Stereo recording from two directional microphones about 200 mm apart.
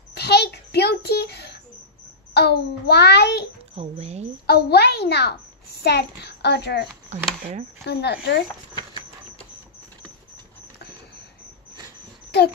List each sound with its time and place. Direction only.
0.1 s a sound: 55° left (ahead or behind)
2.3 s a child's voice: 55° left (ahead or behind)
3.7 s speech: 30° right (ahead or behind)
4.5 s a child's voice: 55° left (ahead or behind)